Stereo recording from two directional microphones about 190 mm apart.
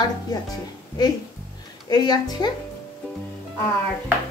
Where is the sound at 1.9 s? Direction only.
20° left (ahead or behind).